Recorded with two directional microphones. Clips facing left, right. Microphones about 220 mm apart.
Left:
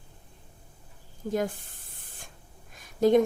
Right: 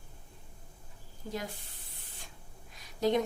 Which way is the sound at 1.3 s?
50° left (ahead or behind).